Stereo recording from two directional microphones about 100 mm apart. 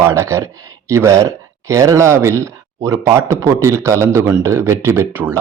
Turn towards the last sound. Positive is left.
turn(degrees=-25)  # may be behind; listen again after turning